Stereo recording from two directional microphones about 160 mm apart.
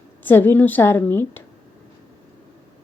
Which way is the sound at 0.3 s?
10° left (ahead or behind).